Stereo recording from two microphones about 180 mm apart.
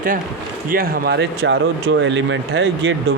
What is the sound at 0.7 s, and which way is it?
Speech, 60° right (ahead or behind).